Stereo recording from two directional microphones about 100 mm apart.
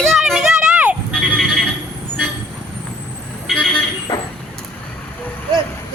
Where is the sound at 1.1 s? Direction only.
Centre (ahead or behind).